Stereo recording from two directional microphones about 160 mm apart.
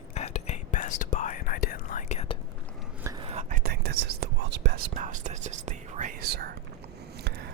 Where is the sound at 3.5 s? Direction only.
70° right (ahead or behind).